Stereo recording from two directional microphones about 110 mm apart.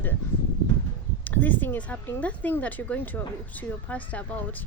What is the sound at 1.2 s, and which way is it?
Speech, 15° left (ahead or behind).